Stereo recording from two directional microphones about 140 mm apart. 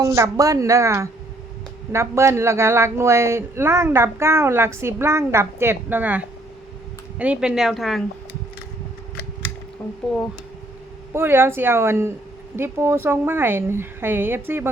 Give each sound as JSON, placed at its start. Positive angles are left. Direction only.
{"t": 0.1, "sound": "a woman's voice", "side_deg": -20}
{"t": 11.1, "sound": "a woman's voice", "side_deg": -15}